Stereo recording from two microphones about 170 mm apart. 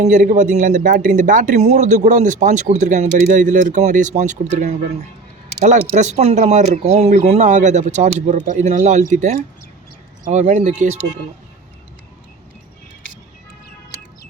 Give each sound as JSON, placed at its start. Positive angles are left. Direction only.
{"t": 0.0, "sound": "speech", "side_deg": -50}